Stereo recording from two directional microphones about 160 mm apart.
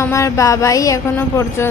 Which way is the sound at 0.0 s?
20° left (ahead or behind).